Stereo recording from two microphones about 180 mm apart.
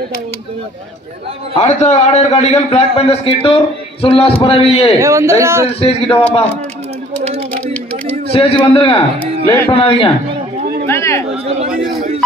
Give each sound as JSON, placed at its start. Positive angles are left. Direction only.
{"t": 1.6, "sound": "a man's voice", "side_deg": 40}
{"t": 4.9, "sound": "a man's voice", "side_deg": -15}
{"t": 5.7, "sound": "a man's voice", "side_deg": 35}
{"t": 8.3, "sound": "a man's voice", "side_deg": 30}
{"t": 9.2, "sound": "speech", "side_deg": 10}
{"t": 9.7, "sound": "a man's voice", "side_deg": 30}
{"t": 10.9, "sound": "chatter", "side_deg": 15}